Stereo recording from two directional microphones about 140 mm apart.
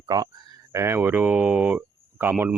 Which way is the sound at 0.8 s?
15° right (ahead or behind).